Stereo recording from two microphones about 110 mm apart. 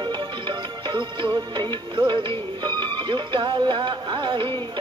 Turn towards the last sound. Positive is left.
turn(degrees=-50)  # may be behind; listen again after turning